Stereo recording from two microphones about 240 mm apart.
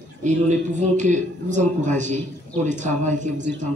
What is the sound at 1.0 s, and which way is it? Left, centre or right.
A man's voice, right.